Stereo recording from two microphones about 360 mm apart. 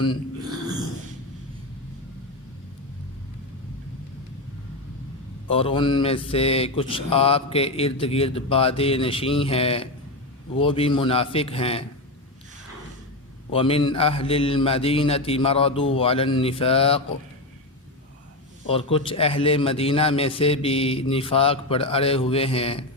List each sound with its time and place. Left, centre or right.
5.5 s mantra: centre
13.5 s mantra: centre
18.7 s mantra: centre